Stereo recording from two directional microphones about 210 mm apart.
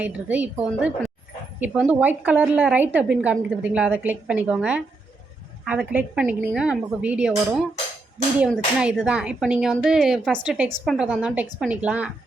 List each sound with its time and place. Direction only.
0.0 s a woman's voice: 5° right (ahead or behind)